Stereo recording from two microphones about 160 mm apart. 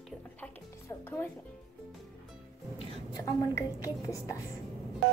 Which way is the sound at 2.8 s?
30° left (ahead or behind).